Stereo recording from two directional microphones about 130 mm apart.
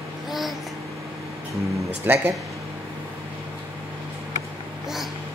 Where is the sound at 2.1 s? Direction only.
15° right (ahead or behind).